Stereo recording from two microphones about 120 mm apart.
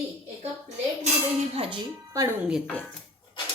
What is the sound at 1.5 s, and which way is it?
Speech, 55° right (ahead or behind).